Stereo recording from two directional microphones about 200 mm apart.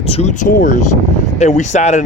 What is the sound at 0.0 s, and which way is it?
Speech, 30° left (ahead or behind).